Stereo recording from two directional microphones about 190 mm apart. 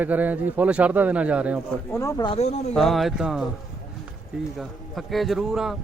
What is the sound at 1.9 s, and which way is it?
Speech, 15° left (ahead or behind).